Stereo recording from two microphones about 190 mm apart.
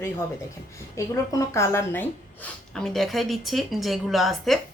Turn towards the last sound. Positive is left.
turn(degrees=0)  # may be behind; listen again after turning